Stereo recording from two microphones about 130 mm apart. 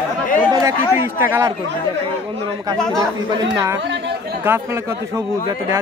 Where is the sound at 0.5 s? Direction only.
25° right (ahead or behind).